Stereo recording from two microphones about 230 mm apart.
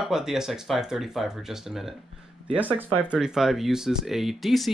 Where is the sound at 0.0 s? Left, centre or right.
Centre.